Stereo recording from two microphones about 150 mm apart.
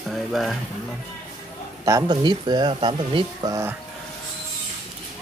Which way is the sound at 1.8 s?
25° right (ahead or behind).